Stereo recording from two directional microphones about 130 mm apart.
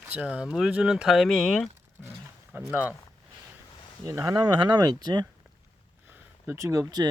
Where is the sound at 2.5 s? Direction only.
5° right (ahead or behind).